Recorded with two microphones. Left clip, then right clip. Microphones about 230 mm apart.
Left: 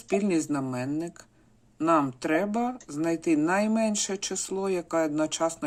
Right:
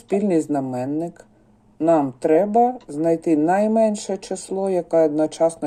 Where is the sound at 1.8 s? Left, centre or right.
Centre.